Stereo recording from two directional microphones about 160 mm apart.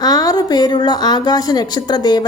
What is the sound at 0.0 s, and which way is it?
A woman's voice, 25° left (ahead or behind).